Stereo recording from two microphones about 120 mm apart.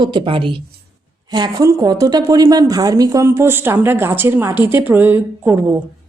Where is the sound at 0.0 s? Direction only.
45° right (ahead or behind).